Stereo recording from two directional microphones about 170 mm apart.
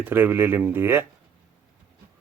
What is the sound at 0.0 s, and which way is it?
Speech, 10° right (ahead or behind).